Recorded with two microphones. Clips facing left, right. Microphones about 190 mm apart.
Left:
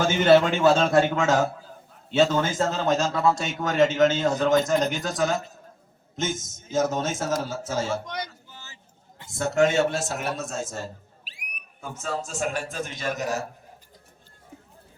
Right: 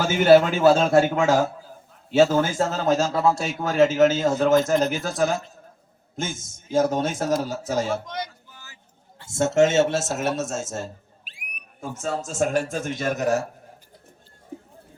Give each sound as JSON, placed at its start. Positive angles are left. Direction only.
{"t": 0.0, "sound": "a man's voice", "side_deg": -10}
{"t": 8.0, "sound": "speech", "side_deg": 0}
{"t": 9.3, "sound": "a man's voice", "side_deg": -25}
{"t": 11.3, "sound": "a sound", "side_deg": -55}
{"t": 12.3, "sound": "a man's voice", "side_deg": -45}